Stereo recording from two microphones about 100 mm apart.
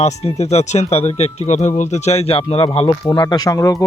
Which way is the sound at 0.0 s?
90° left.